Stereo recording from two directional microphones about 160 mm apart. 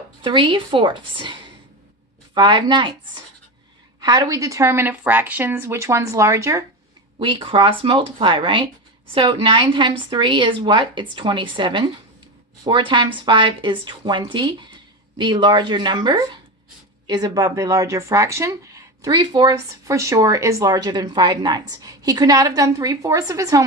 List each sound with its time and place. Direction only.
0.2 s a woman's voice: 30° right (ahead or behind)
4.0 s a woman's voice: 25° right (ahead or behind)
7.2 s a woman's voice: 30° right (ahead or behind)